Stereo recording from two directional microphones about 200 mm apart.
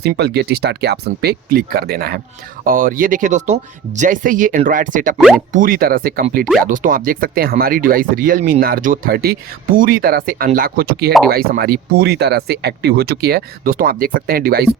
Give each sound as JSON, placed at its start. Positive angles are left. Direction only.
{"t": 0.0, "sound": "speech", "side_deg": -55}
{"t": 5.1, "sound": "speech", "side_deg": 0}
{"t": 5.5, "sound": "speech", "side_deg": -45}